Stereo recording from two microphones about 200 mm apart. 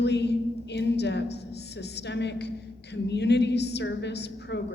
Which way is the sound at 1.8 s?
55° left (ahead or behind).